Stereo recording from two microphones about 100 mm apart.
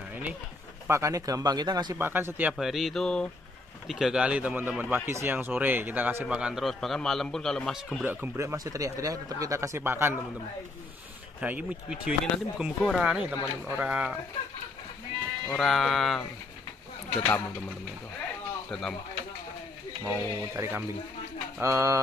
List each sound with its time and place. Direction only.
0.8 s speech: 30° right (ahead or behind)
2.0 s speech: 20° right (ahead or behind)
2.5 s a man's voice: centre (ahead or behind)
3.8 s a man's voice: 5° right (ahead or behind)
8.0 s speech: 20° right (ahead or behind)
8.4 s speech: 30° right (ahead or behind)
11.4 s speech: 15° right (ahead or behind)
15.4 s a man's voice: 5° left (ahead or behind)
18.7 s speech: 5° left (ahead or behind)
20.1 s speech: 20° right (ahead or behind)